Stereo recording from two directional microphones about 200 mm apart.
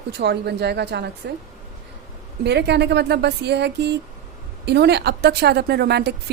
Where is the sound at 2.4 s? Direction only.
55° right (ahead or behind).